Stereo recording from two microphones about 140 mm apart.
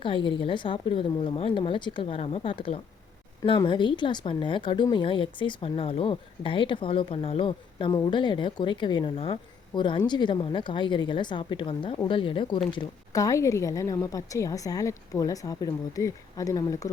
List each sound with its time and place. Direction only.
0.0 s a woman's voice: 35° left (ahead or behind)